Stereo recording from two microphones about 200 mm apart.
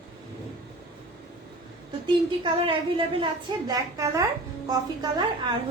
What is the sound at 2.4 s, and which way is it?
A woman's voice, 25° right (ahead or behind).